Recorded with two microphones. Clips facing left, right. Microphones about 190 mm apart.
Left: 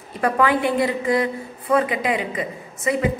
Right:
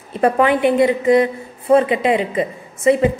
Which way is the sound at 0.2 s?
25° right (ahead or behind).